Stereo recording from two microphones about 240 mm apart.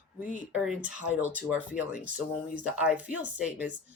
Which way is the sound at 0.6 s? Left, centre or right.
Centre.